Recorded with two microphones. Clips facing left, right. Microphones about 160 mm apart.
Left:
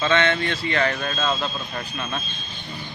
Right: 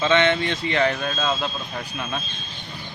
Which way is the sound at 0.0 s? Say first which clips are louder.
Right 2 dB; 15° right (ahead or behind).